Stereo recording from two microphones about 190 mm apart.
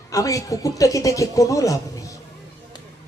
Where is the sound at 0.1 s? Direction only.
15° left (ahead or behind).